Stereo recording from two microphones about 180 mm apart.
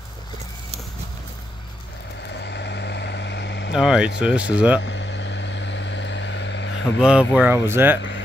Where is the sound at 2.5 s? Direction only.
70° left (ahead or behind).